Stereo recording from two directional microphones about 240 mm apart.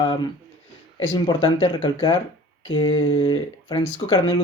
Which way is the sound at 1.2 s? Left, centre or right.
Centre.